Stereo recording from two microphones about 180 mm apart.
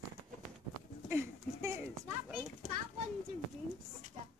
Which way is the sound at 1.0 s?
15° right (ahead or behind).